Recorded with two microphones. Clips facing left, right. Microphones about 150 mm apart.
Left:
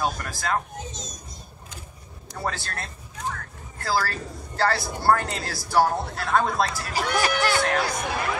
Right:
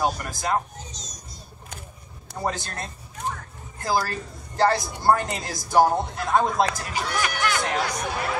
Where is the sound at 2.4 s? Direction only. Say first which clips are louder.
Right 2 dB; 15° right (ahead or behind).